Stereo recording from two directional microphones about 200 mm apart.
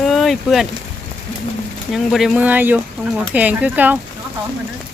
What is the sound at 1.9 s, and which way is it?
Speech, centre (ahead or behind).